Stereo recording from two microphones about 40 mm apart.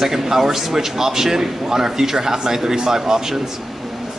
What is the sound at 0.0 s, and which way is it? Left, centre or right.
A man's voice, centre.